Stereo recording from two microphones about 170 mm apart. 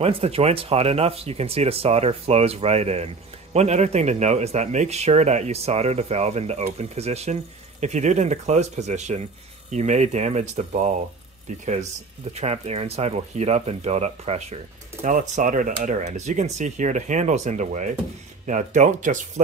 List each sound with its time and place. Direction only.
0.0 s speech: 35° right (ahead or behind)